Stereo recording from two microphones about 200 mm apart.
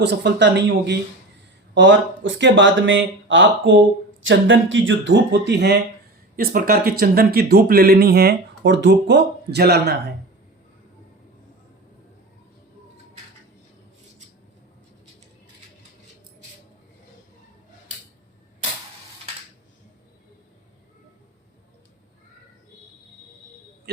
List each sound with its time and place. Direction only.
0.0 s speech: 60° right (ahead or behind)